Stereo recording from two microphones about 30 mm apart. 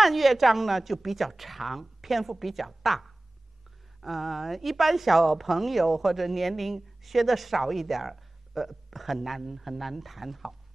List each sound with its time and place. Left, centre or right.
0.0 s speech: centre